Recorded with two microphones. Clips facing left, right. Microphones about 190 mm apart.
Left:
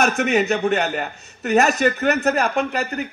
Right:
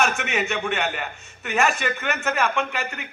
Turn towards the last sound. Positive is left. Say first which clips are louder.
# left 5 dB
turn(degrees=40)  # may be behind; listen again after turning